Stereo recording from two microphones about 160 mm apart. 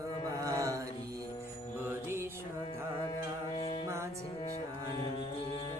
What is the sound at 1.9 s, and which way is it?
Music, 15° right (ahead or behind).